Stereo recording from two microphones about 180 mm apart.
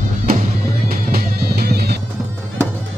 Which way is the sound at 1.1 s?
60° right (ahead or behind).